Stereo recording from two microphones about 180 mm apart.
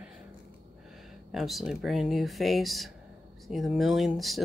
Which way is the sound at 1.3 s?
Centre (ahead or behind).